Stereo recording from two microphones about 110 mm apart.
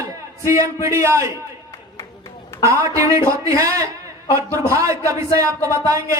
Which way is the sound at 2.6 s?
30° right (ahead or behind).